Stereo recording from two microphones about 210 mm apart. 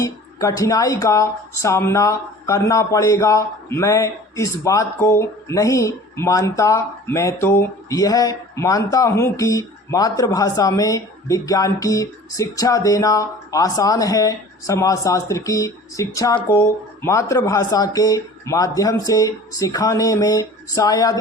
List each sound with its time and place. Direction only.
0.0 s speech: 15° left (ahead or behind)